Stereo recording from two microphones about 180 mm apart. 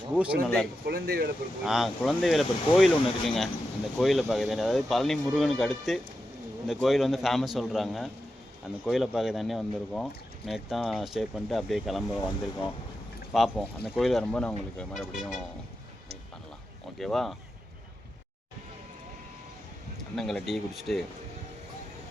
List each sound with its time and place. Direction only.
0.1 s speech: 5° right (ahead or behind)
0.9 s speech: 60° right (ahead or behind)
1.6 s speech: centre (ahead or behind)
13.3 s speech: centre (ahead or behind)
17.0 s speech: centre (ahead or behind)
20.1 s speech: centre (ahead or behind)